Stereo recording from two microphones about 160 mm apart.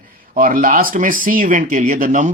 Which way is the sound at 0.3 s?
60° right (ahead or behind).